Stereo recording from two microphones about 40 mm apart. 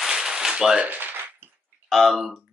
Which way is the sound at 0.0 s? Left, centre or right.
Centre.